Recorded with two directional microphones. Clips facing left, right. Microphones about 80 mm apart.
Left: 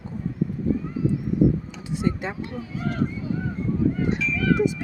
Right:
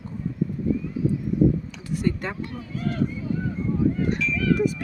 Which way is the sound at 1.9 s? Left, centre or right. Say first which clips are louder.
Even; left.